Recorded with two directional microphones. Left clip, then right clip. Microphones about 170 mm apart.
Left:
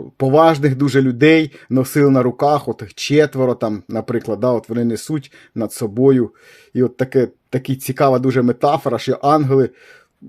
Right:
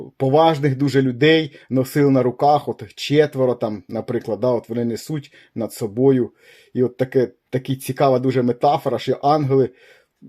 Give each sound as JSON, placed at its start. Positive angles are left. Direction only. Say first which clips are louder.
{"t": 0.2, "sound": "speech", "louder": "left 3 dB", "side_deg": 30}